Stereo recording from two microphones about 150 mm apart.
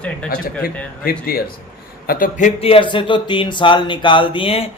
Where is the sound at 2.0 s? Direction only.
75° left (ahead or behind).